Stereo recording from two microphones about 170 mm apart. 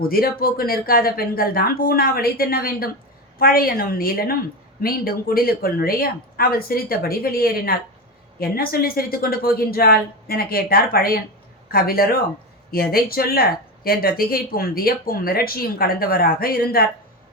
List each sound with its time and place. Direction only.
0.0 s speech: 60° left (ahead or behind)